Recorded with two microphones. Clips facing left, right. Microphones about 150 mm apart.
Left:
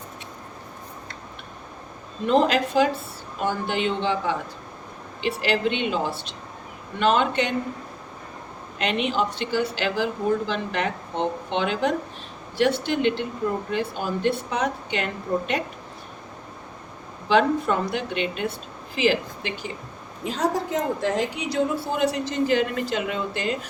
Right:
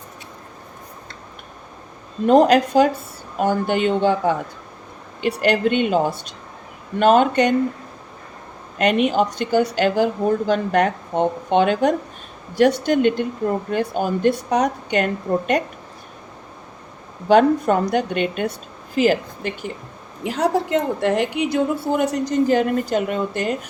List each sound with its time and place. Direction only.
2.2 s a woman's voice: 45° right (ahead or behind)
8.8 s a woman's voice: 50° right (ahead or behind)
17.2 s a woman's voice: 45° right (ahead or behind)
20.2 s a woman's voice: 75° right (ahead or behind); by 23.6 s 50° right (ahead or behind)